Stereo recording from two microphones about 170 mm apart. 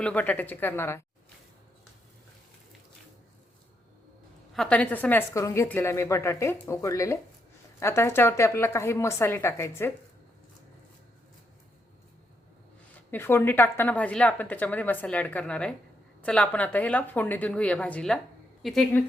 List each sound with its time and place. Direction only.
0.0 s a woman's voice: 10° left (ahead or behind)
4.5 s a woman's voice: 5° left (ahead or behind)
13.1 s a woman's voice: 15° left (ahead or behind)